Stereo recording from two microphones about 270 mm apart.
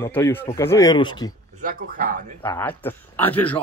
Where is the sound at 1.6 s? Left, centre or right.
Right.